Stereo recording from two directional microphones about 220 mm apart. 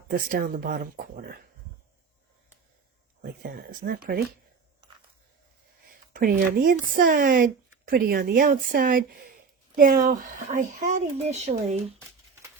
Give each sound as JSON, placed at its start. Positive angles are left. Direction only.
{"t": 0.1, "sound": "speech", "side_deg": -40}
{"t": 3.2, "sound": "speech", "side_deg": -45}
{"t": 6.1, "sound": "speech", "side_deg": -40}